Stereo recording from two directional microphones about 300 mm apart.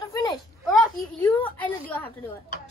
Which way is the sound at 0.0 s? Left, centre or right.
Centre.